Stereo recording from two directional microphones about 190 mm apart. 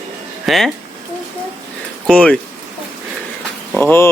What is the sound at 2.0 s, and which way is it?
Speech, 5° left (ahead or behind).